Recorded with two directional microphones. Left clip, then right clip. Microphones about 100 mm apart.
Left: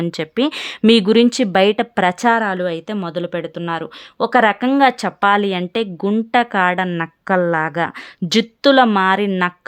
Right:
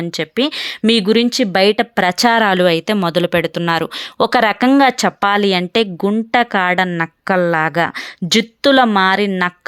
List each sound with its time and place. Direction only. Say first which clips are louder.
0.0 s a woman's voice: right 1 dB; 5° right (ahead or behind)
2.1 s a woman's voice: right 4 dB; 40° right (ahead or behind); by 9.0 s 15° right (ahead or behind)